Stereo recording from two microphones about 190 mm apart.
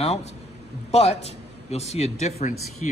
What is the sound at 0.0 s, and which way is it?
A man's voice, 35° left (ahead or behind).